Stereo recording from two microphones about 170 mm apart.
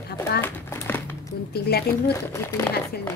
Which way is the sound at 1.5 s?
70° left (ahead or behind).